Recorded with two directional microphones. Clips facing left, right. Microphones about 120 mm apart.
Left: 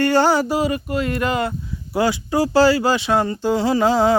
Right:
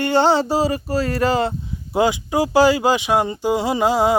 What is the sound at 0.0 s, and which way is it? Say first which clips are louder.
Speech: even; 20° right (ahead or behind).